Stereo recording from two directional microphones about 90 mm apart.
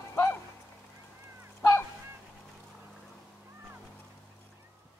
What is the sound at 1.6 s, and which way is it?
Honk, 30° left (ahead or behind).